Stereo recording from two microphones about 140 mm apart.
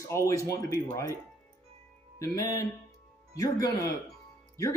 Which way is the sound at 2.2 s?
25° left (ahead or behind).